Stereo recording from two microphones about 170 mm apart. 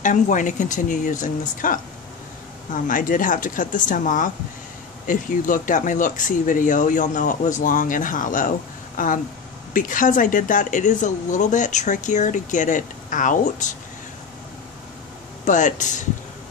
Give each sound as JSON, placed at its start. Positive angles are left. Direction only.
{"t": 0.0, "sound": "speech", "side_deg": 50}
{"t": 2.9, "sound": "speech", "side_deg": 55}
{"t": 15.4, "sound": "speech", "side_deg": 45}